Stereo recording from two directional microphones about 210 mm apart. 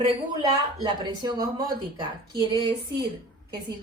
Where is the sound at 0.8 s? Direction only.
20° right (ahead or behind).